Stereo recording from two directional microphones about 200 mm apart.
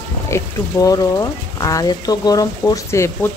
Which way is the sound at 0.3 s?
15° left (ahead or behind).